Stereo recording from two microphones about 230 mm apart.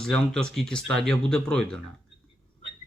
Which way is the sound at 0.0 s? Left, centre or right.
Centre.